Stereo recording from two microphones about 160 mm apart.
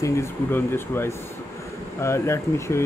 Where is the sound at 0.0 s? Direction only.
15° left (ahead or behind).